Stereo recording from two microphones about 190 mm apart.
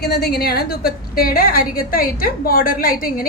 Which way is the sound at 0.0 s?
60° left (ahead or behind).